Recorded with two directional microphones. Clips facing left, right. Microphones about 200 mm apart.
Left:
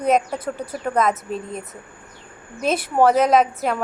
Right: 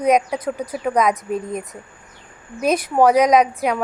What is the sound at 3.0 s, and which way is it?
Speech, 10° right (ahead or behind).